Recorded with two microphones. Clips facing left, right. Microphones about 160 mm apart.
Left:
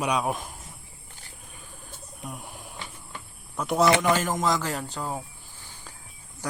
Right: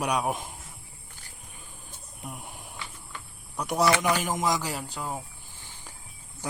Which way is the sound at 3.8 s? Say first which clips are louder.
Left 2 dB; 25° left (ahead or behind).